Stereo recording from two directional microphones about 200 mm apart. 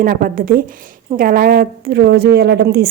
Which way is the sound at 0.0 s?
45° right (ahead or behind).